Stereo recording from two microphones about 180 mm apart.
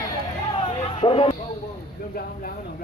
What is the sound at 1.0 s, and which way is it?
Speech, 30° left (ahead or behind).